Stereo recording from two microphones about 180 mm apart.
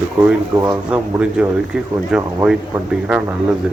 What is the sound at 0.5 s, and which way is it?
Speech, 20° right (ahead or behind).